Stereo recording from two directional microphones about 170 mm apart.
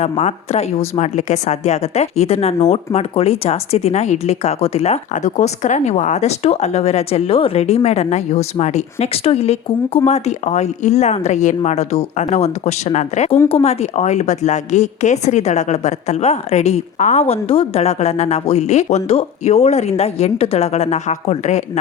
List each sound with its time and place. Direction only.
0.0 s speech: 40° left (ahead or behind)